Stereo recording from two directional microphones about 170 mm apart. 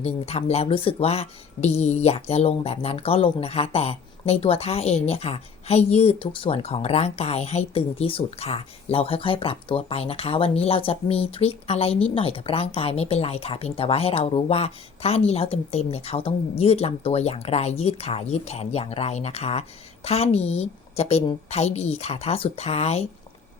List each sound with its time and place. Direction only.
0.0 s speech: 35° left (ahead or behind)